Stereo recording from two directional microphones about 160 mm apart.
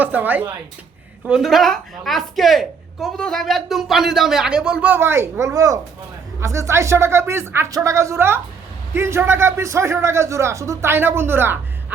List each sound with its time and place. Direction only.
0.0 s a man's voice: 10° right (ahead or behind)